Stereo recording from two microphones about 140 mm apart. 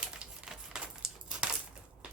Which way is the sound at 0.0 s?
5° right (ahead or behind).